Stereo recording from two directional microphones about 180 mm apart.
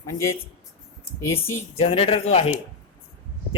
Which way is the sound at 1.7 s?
35° left (ahead or behind).